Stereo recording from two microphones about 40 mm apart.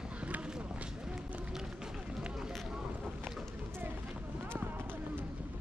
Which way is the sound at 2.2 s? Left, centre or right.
Centre.